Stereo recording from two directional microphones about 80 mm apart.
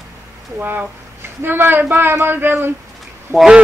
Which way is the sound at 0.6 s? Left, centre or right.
Right.